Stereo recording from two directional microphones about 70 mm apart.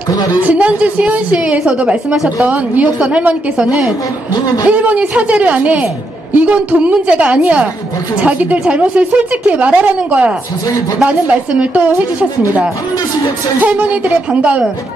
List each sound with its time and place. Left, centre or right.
0.3 s a woman's voice: right
13.6 s a woman's voice: right